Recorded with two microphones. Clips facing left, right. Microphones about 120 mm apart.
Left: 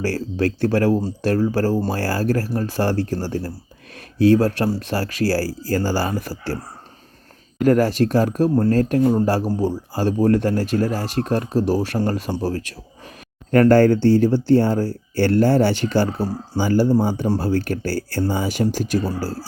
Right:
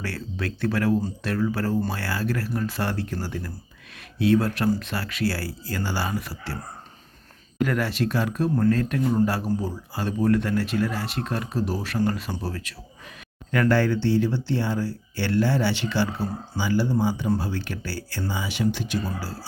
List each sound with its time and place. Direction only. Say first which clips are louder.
0.0 s speech: left 10 dB; 35° left (ahead or behind)
7.6 s speech: left 8 dB; 40° left (ahead or behind)